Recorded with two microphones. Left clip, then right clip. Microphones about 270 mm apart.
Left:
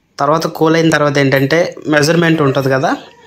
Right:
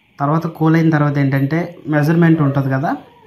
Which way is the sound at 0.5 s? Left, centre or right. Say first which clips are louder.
Left 3 dB; left.